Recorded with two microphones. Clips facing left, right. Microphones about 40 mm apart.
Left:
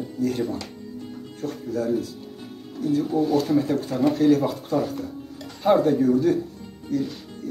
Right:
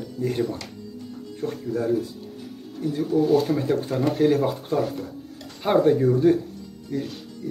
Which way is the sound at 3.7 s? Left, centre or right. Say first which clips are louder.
Left 1 dB; right.